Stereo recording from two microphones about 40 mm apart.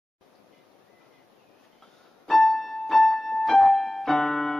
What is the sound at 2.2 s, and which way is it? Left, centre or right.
Keyboard, centre.